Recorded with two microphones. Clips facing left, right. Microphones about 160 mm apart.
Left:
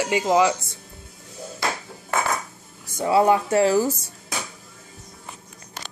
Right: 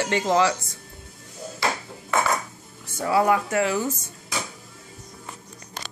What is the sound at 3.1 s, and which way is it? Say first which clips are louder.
Speech: left 3 dB; 25° left (ahead or behind).